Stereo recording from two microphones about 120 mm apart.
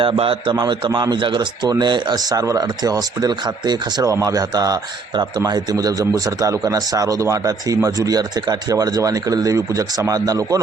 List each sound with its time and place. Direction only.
0.0 s speech: 45° right (ahead or behind); by 10.6 s 30° right (ahead or behind)